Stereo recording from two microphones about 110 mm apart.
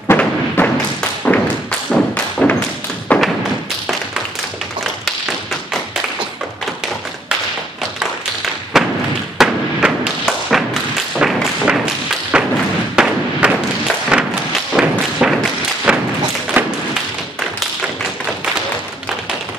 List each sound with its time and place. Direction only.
0.1 s thump: 20° left (ahead or behind)
8.7 s thump: 5° right (ahead or behind)